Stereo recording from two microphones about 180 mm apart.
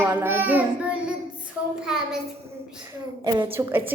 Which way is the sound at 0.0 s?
10° right (ahead or behind).